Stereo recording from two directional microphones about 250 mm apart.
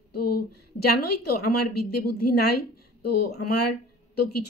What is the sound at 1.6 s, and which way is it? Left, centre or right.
Speech, left.